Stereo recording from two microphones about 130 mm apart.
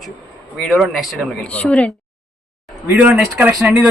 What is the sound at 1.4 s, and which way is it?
Speech, 10° left (ahead or behind).